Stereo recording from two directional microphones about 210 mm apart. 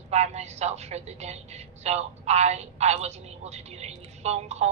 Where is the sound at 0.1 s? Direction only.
30° right (ahead or behind).